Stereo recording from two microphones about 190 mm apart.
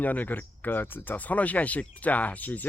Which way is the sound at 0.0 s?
10° left (ahead or behind).